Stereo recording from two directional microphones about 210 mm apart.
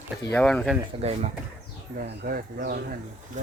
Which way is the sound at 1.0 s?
30° right (ahead or behind).